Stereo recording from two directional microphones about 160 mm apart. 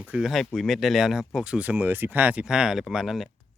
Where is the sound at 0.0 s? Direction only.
5° right (ahead or behind).